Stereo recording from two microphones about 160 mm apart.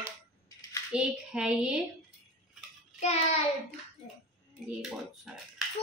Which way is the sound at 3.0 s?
40° left (ahead or behind).